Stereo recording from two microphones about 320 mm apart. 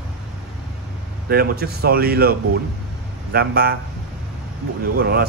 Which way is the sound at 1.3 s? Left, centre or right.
Right.